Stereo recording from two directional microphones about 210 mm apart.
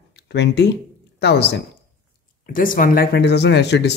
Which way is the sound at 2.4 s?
40° left (ahead or behind).